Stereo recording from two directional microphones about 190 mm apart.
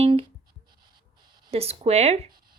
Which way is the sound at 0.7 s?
25° right (ahead or behind).